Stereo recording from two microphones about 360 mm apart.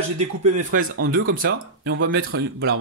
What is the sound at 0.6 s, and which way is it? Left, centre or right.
Speech, right.